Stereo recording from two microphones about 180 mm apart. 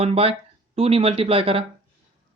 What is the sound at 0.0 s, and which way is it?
Speech, 35° right (ahead or behind).